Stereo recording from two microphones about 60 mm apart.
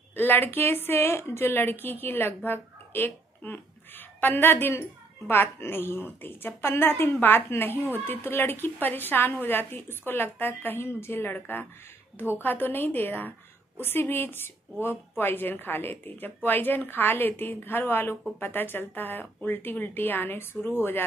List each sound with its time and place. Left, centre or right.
0.1 s a woman's voice: left